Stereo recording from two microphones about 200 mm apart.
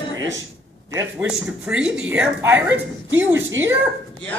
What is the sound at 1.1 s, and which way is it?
Speech, 5° right (ahead or behind).